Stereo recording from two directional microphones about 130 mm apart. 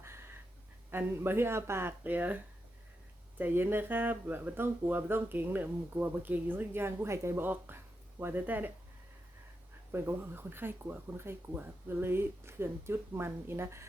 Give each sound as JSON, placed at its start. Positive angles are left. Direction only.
{"t": 0.0, "sound": "a sound", "side_deg": -20}
{"t": 0.9, "sound": "speech", "side_deg": -15}
{"t": 9.9, "sound": "speech", "side_deg": -20}